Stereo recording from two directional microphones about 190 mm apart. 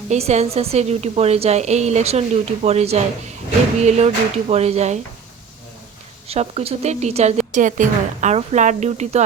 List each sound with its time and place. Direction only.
0.1 s a woman's voice: 35° right (ahead or behind)
6.2 s a woman's voice: 30° right (ahead or behind)